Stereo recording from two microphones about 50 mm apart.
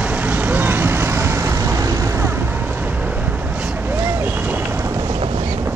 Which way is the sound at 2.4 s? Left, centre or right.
Right.